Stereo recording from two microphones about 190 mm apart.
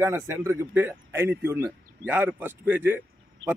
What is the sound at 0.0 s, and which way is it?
Speech, 15° right (ahead or behind).